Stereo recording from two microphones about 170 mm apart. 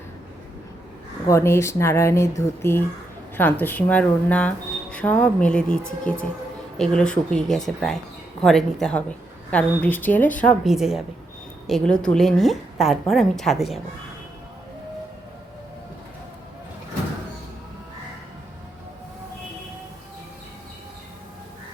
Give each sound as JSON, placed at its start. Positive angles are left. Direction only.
{"t": 1.3, "sound": "a woman's voice", "side_deg": 15}